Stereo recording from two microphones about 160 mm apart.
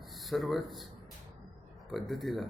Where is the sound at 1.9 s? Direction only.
Centre (ahead or behind).